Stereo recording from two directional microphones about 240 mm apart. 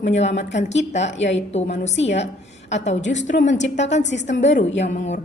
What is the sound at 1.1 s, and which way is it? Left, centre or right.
Speech, left.